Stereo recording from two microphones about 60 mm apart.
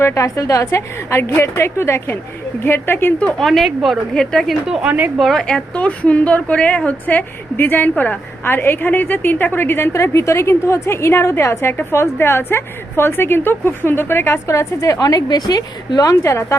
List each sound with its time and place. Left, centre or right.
0.0 s a woman's voice: left
0.7 s a woman's voice: left
3.2 s a woman's voice: centre
4.6 s a woman's voice: centre
4.9 s a woman's voice: right
5.1 s a woman's voice: centre
5.7 s a woman's voice: left
7.5 s a woman's voice: left
14.4 s a woman's voice: left
16.2 s a woman's voice: left